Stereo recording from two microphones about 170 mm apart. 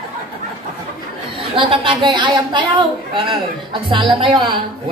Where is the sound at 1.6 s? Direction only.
30° right (ahead or behind).